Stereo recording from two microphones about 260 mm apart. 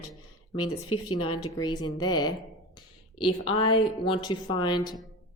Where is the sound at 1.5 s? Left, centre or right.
Centre.